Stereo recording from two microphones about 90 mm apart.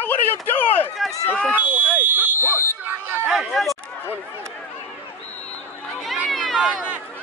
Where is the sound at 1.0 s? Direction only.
Centre (ahead or behind).